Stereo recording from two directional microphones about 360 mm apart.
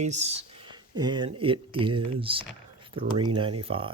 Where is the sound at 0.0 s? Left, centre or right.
Centre.